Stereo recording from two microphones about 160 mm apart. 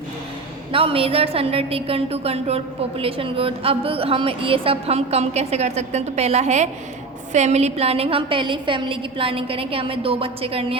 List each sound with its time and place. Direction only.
0.7 s a woman's voice: 35° right (ahead or behind)